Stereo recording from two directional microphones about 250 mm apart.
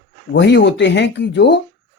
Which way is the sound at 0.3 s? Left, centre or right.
Left.